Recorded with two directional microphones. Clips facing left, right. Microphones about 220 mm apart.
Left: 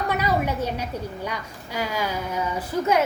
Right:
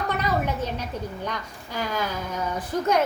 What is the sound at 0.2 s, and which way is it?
A woman's voice, 10° left (ahead or behind).